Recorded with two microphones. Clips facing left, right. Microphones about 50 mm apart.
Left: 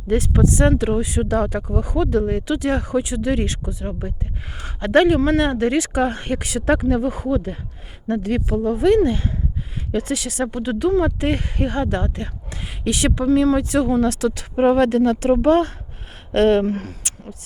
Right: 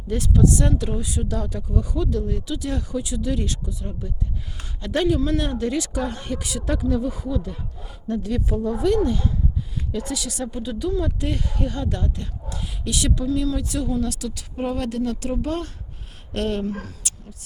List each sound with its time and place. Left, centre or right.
0.1 s speech: left